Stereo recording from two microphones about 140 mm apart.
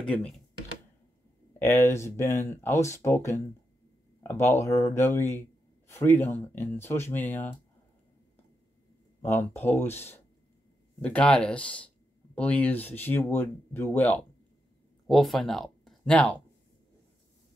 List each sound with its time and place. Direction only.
0.0 s speech: 10° left (ahead or behind)
1.6 s speech: 20° left (ahead or behind)
9.5 s speech: 15° left (ahead or behind)
15.0 s speech: centre (ahead or behind)